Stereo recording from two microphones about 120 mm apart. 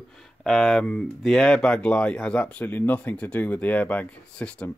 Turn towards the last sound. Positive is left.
turn(degrees=10)  # may be behind; listen again after turning